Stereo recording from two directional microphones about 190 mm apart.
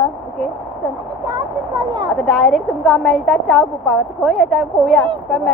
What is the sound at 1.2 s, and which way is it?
Speech, 20° right (ahead or behind).